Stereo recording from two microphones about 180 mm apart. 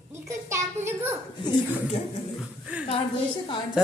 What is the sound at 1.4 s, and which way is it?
Speech, 30° left (ahead or behind).